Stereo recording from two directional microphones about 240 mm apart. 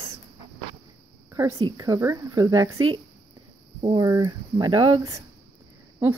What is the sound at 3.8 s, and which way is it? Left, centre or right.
A woman's voice, centre.